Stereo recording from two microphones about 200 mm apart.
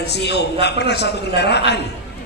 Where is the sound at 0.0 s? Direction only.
55° left (ahead or behind).